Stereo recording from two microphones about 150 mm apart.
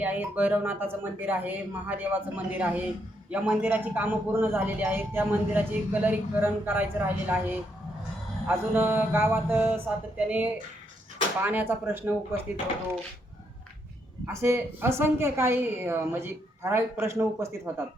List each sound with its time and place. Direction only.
0.0 s a man's voice: 10° right (ahead or behind)
8.4 s a man's voice: 15° right (ahead or behind)
14.3 s a man's voice: 20° right (ahead or behind)